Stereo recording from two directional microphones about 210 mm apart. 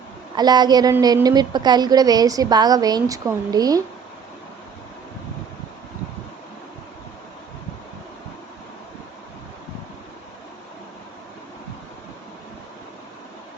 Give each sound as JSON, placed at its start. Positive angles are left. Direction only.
{"t": 0.3, "sound": "a woman's voice", "side_deg": -20}